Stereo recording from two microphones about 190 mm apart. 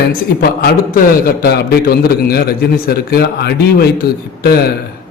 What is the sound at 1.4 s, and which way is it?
A man's voice, 55° left (ahead or behind).